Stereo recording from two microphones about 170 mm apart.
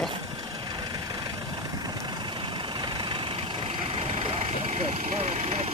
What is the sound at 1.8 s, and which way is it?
Vehicle, 25° right (ahead or behind).